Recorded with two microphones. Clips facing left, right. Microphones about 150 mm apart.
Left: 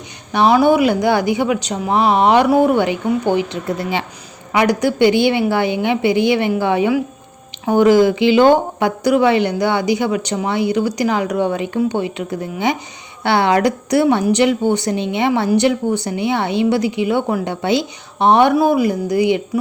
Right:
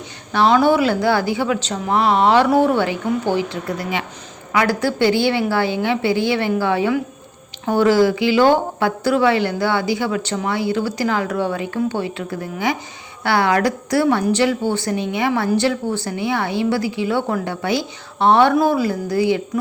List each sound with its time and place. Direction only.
0.3 s a woman's voice: 15° left (ahead or behind)